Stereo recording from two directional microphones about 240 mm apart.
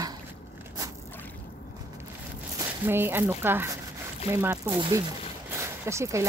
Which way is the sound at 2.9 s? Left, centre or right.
Centre.